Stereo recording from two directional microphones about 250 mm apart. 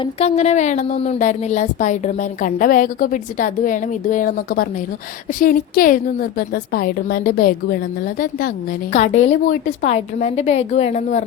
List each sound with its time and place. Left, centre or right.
0.0 s a woman's voice: left